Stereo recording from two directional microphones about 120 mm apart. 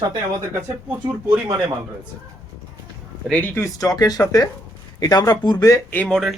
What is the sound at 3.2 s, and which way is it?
Speech, 15° left (ahead or behind).